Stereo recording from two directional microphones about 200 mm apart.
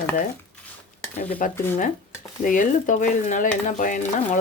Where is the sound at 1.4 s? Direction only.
40° left (ahead or behind).